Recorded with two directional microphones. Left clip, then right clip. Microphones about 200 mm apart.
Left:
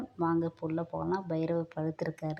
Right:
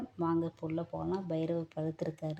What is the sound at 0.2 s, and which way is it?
A woman's voice, 10° left (ahead or behind).